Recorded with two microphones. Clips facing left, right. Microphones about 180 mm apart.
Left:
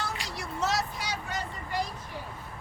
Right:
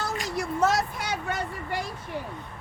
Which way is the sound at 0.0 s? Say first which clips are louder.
Right 6 dB; 45° right (ahead or behind).